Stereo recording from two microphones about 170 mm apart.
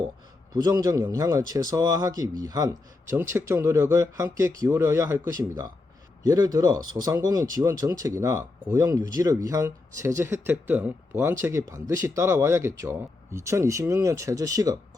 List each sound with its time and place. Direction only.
0.5 s speech: 20° right (ahead or behind)